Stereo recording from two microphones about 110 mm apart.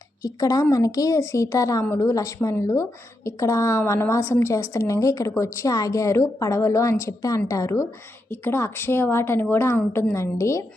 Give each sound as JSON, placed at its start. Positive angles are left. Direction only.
{"t": 0.2, "sound": "a woman's voice", "side_deg": 30}